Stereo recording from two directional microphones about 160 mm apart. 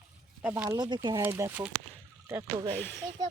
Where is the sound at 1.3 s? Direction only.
10° right (ahead or behind).